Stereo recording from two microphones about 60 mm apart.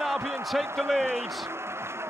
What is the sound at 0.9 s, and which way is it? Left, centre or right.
Speech, right.